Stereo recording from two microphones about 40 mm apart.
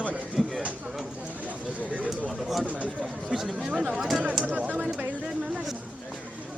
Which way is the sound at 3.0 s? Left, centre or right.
Centre.